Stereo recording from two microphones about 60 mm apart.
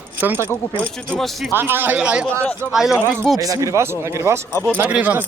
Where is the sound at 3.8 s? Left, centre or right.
Right.